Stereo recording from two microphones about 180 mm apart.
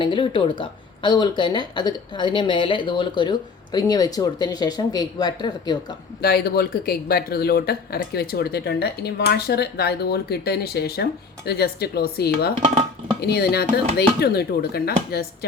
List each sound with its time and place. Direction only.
0.0 s speech: 30° left (ahead or behind)
6.2 s speech: 60° left (ahead or behind)